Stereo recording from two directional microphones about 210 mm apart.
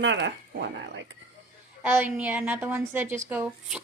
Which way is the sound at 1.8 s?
10° right (ahead or behind).